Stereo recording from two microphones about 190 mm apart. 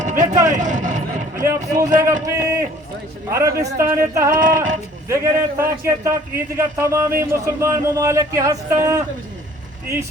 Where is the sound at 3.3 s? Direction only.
15° right (ahead or behind).